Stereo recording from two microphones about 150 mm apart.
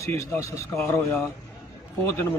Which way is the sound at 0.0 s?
20° left (ahead or behind).